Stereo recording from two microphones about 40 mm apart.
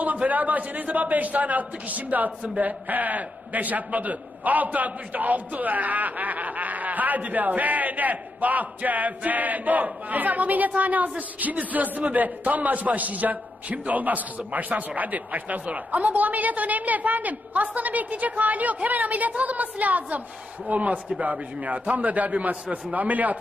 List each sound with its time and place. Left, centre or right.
0.0 s a man's voice: right